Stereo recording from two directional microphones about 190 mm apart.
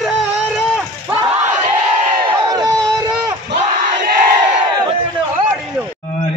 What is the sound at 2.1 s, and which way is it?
Crowd, 20° right (ahead or behind).